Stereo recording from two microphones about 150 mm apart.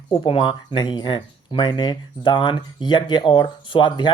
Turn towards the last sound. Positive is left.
turn(degrees=30)  # may be behind; listen again after turning